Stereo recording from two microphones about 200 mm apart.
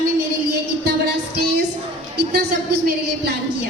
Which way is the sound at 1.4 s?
55° right (ahead or behind).